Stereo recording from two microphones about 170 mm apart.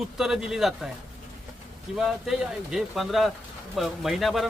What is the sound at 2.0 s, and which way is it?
Speech, centre (ahead or behind).